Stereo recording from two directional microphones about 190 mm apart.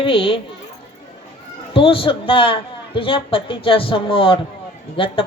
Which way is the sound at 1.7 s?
30° left (ahead or behind).